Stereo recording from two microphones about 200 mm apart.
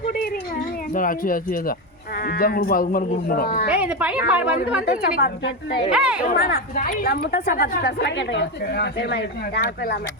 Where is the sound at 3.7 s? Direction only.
5° right (ahead or behind).